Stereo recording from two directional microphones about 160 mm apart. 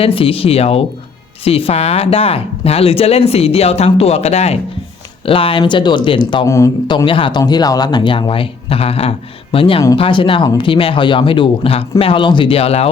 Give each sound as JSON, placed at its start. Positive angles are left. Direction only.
{"t": 0.0, "sound": "speech", "side_deg": 35}